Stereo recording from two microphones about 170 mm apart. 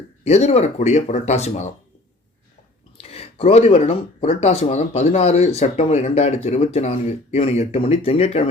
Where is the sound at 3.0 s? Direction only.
35° left (ahead or behind).